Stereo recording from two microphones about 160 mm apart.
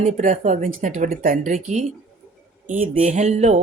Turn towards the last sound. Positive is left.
turn(degrees=-45)  # may be behind; listen again after turning